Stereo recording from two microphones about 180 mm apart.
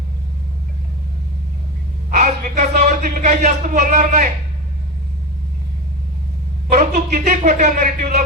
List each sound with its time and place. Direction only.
2.0 s a man's voice: 45° right (ahead or behind)
6.7 s speech: 45° right (ahead or behind)